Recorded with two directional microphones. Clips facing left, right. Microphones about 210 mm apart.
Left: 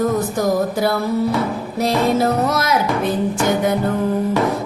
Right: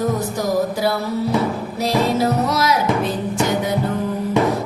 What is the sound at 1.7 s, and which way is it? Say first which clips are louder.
Music: left 2 dB; 50° left (ahead or behind).